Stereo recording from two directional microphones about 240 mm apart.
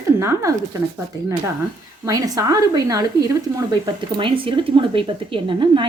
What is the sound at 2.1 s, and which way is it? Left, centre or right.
A woman's voice, centre.